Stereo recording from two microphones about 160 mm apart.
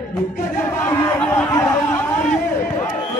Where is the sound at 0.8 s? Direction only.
15° left (ahead or behind).